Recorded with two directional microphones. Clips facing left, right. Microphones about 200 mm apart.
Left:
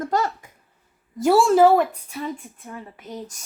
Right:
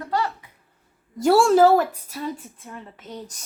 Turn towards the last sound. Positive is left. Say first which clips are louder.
# left 2 dB
turn(degrees=10)  # may be behind; listen again after turning